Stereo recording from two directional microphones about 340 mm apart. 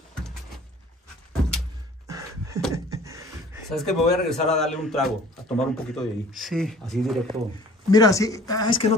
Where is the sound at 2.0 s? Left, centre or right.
Centre.